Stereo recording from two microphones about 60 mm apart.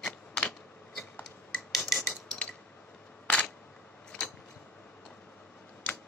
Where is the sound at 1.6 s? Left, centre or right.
Centre.